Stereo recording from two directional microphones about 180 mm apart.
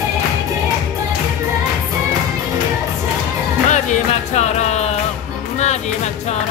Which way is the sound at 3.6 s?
40° left (ahead or behind).